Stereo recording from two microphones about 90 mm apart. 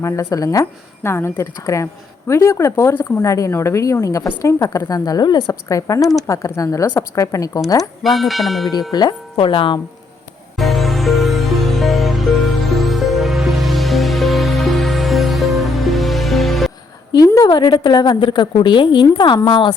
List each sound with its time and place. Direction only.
0.0 s a woman's voice: 35° left (ahead or behind)
8.0 s bell: centre (ahead or behind)
8.9 s a woman's voice: 50° left (ahead or behind)
9.3 s speech: 75° left (ahead or behind)
10.6 s music: centre (ahead or behind)
17.1 s a woman's voice: 40° left (ahead or behind); by 19.7 s 65° left (ahead or behind)